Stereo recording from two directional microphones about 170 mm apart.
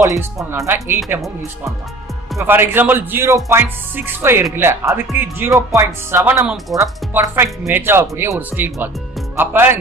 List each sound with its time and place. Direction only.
0.0 s speech: 20° right (ahead or behind)
2.4 s speech: 15° right (ahead or behind)